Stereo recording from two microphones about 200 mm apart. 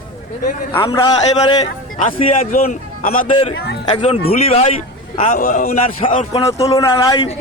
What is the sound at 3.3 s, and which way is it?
A man's voice, 25° left (ahead or behind).